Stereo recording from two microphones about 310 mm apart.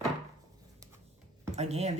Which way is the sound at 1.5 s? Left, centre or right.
Right.